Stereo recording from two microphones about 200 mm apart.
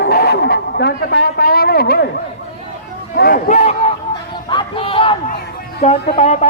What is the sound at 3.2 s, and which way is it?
Speech, 45° left (ahead or behind).